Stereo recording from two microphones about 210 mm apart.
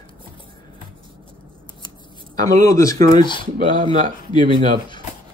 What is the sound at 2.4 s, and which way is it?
Speech, 15° left (ahead or behind).